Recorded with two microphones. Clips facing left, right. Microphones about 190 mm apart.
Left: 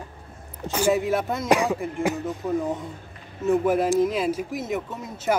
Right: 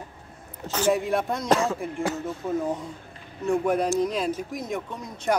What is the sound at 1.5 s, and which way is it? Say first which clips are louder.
Speech: left 2 dB; 15° left (ahead or behind).